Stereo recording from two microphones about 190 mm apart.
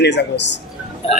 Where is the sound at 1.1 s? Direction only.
35° left (ahead or behind).